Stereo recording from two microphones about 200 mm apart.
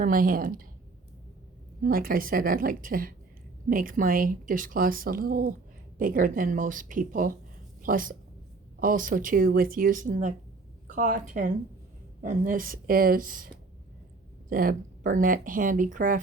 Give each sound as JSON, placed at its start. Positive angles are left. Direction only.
{"t": 0.0, "sound": "speech", "side_deg": -45}
{"t": 1.8, "sound": "a woman's voice", "side_deg": -45}
{"t": 14.5, "sound": "speech", "side_deg": -45}